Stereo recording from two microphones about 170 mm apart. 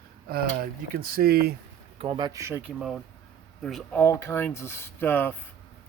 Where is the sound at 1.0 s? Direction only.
60° right (ahead or behind).